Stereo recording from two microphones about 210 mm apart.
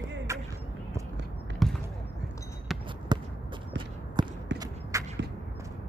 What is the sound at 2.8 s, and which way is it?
Basketball bounce, 20° right (ahead or behind).